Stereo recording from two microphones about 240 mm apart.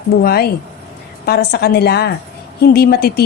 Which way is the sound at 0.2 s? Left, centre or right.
Left.